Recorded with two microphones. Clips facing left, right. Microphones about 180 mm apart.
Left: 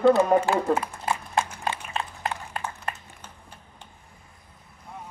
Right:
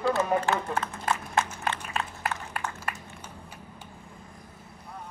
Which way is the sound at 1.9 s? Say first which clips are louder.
Left 1 dB; 25° left (ahead or behind).